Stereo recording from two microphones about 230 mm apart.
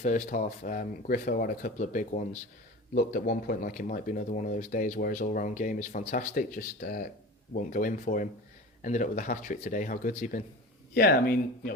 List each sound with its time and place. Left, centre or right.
0.0 s speech: left